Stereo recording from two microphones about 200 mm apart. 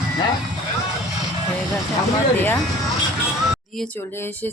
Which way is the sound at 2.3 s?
10° left (ahead or behind).